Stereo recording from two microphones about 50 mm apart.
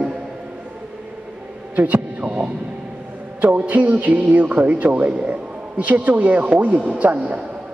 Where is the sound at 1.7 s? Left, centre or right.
Right.